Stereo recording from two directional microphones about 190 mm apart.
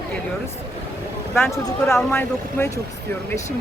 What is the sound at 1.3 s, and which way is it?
Speech, 10° left (ahead or behind).